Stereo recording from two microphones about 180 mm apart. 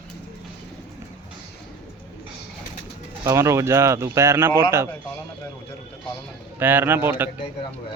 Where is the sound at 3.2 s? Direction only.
15° right (ahead or behind).